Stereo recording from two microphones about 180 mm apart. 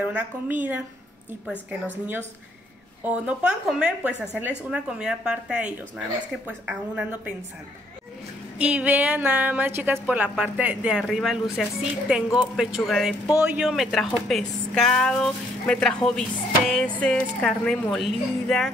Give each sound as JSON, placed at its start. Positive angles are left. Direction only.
{"t": 0.0, "sound": "a woman's voice", "side_deg": -10}
{"t": 8.5, "sound": "a woman's voice", "side_deg": -5}